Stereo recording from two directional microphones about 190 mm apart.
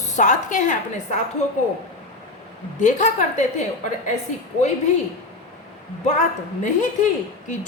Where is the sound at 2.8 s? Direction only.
40° left (ahead or behind).